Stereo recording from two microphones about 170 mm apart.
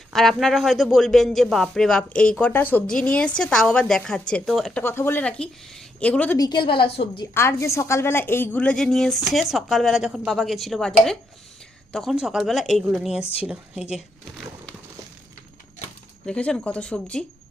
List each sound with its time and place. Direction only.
0.1 s speech: centre (ahead or behind)
4.8 s speech: 15° left (ahead or behind)
6.3 s a woman's voice: 25° left (ahead or behind)
7.3 s speech: 15° left (ahead or behind); by 13.2 s 5° right (ahead or behind)
16.2 s speech: 5° left (ahead or behind)